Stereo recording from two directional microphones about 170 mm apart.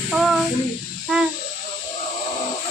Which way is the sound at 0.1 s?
Centre (ahead or behind).